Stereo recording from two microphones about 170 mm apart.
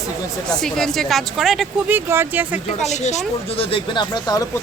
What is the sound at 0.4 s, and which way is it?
Speech, 5° left (ahead or behind).